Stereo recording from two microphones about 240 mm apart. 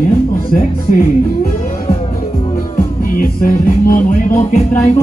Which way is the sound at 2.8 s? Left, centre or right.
Left.